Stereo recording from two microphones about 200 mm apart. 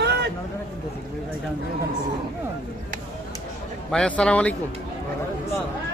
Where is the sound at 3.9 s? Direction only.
5° left (ahead or behind).